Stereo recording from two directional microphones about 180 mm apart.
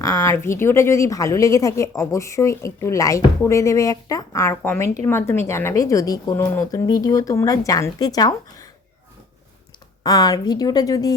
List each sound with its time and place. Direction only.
0.0 s speech: 15° left (ahead or behind)
10.0 s a woman's voice: 20° left (ahead or behind)